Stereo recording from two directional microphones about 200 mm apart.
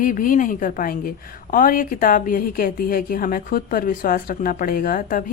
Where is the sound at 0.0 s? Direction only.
40° left (ahead or behind).